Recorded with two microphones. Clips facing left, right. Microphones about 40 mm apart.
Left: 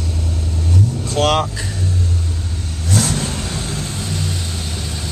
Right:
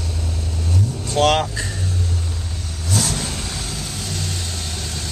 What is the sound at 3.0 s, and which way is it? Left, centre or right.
Vehicle, left.